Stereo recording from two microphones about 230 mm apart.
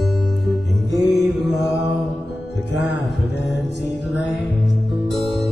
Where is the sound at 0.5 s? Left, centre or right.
Centre.